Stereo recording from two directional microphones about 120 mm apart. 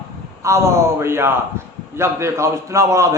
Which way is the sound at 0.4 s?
25° right (ahead or behind).